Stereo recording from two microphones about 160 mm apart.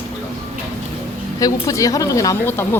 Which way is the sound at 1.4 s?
20° left (ahead or behind).